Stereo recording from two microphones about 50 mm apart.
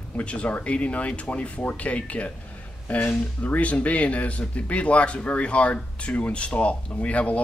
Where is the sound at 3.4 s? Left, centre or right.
Left.